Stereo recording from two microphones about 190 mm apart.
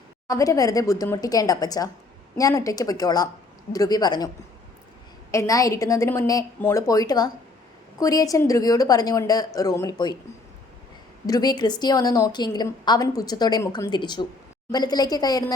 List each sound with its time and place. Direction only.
0.3 s a woman's voice: 20° left (ahead or behind)
5.3 s a woman's voice: 15° left (ahead or behind)
11.3 s a woman's voice: 20° left (ahead or behind)